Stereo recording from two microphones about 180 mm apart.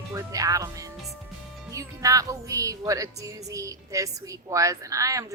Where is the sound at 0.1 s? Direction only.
20° right (ahead or behind).